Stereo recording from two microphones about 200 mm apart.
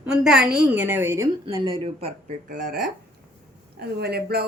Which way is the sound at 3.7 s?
55° right (ahead or behind).